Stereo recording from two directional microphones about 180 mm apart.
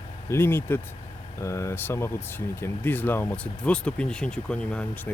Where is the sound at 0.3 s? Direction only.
15° left (ahead or behind).